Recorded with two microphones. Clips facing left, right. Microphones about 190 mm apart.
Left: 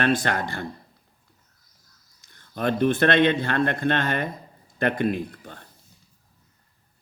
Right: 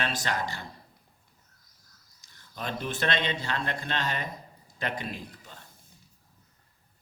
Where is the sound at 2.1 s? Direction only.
55° left (ahead or behind).